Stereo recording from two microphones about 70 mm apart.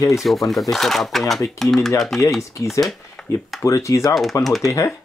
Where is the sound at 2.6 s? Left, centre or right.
Left.